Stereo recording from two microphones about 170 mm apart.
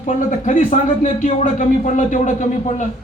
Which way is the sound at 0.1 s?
45° left (ahead or behind).